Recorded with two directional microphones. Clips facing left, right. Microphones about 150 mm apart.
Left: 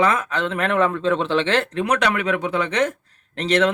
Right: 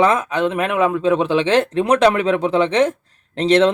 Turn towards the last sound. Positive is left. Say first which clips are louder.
# right 5 dB
turn(degrees=-25)  # may be behind; listen again after turning